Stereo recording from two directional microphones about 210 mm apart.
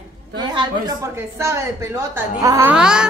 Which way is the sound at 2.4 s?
15° right (ahead or behind).